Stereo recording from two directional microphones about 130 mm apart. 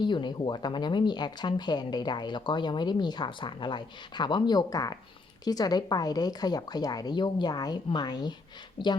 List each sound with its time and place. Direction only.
0.0 s speech: 35° left (ahead or behind)